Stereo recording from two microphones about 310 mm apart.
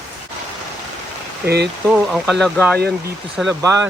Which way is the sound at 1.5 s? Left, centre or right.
Right.